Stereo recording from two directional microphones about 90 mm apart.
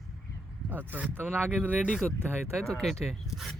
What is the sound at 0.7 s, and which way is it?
Speech, 20° right (ahead or behind).